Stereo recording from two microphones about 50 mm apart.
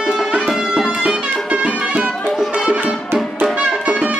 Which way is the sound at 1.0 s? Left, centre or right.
Right.